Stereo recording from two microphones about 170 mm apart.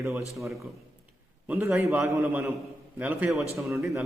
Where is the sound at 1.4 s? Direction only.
5° right (ahead or behind).